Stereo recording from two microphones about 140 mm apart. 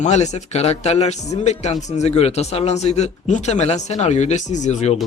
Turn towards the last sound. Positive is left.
turn(degrees=55)  # may be behind; listen again after turning